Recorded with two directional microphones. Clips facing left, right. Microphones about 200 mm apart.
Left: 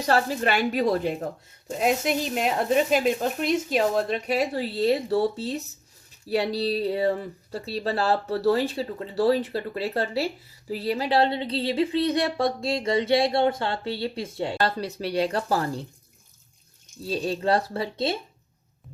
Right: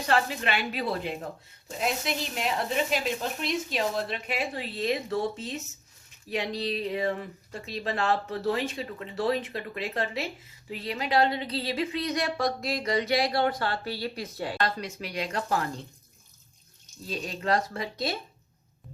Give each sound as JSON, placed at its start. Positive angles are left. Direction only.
{"t": 0.0, "sound": "speech", "side_deg": 40}
{"t": 17.0, "sound": "speech", "side_deg": 30}